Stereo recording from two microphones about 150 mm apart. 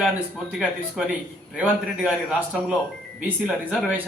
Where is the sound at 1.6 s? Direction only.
5° right (ahead or behind).